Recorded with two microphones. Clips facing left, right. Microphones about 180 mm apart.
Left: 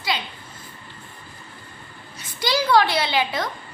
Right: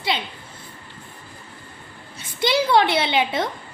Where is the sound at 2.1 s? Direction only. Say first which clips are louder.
Right 3 dB; 25° right (ahead or behind).